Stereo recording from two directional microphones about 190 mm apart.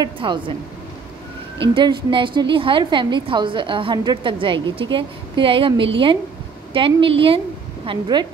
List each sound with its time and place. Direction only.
0.0 s a woman's voice: 25° right (ahead or behind)
1.7 s a woman's voice: 25° right (ahead or behind)